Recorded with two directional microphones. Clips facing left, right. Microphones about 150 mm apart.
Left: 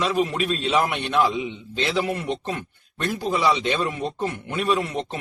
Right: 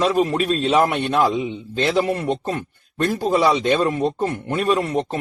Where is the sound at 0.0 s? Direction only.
40° right (ahead or behind).